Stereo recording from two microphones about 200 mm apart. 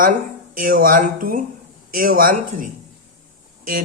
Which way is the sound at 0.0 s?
45° right (ahead or behind).